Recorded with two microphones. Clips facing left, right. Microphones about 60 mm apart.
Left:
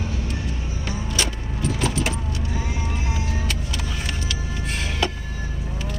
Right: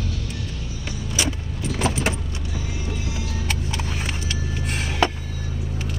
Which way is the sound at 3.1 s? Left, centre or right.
Left.